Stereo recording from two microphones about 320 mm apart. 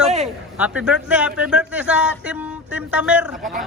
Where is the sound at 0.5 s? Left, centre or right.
Centre.